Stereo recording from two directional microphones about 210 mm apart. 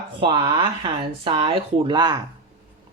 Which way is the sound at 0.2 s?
25° right (ahead or behind).